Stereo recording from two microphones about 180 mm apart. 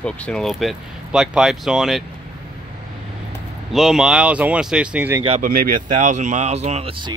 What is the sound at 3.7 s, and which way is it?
Speech, centre (ahead or behind).